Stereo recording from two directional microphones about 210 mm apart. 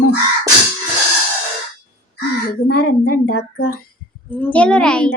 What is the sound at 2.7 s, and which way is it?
Speech, 45° left (ahead or behind).